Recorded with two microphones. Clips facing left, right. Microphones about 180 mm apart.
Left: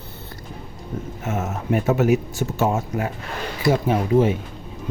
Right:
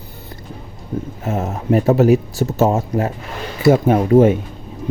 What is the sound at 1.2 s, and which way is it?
Speech, 35° right (ahead or behind).